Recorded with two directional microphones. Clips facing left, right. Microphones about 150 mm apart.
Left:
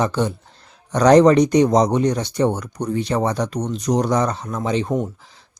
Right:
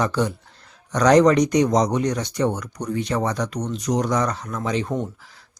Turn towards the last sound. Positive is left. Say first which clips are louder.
# left 3 dB
turn(degrees=30)  # may be behind; listen again after turning